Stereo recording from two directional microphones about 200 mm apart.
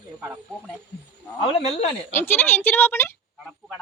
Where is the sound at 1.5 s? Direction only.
30° left (ahead or behind).